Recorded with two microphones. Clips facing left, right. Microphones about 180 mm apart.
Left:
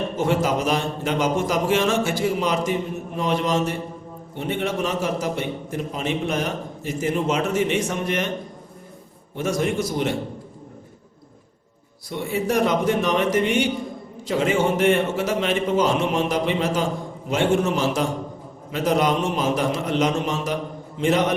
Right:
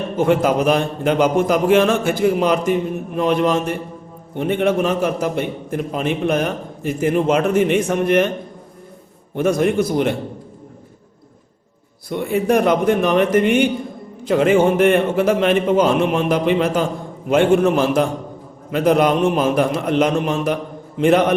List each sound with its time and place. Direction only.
0.2 s a man's voice: 55° right (ahead or behind)
9.3 s a man's voice: 55° right (ahead or behind)
12.0 s a man's voice: 55° right (ahead or behind)